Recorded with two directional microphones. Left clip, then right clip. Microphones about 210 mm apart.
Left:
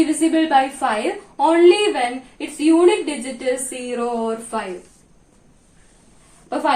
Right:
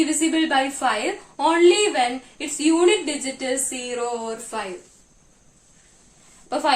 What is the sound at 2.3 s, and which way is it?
A woman's voice, 25° right (ahead or behind).